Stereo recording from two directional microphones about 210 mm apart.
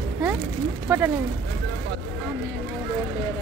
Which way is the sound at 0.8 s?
10° right (ahead or behind).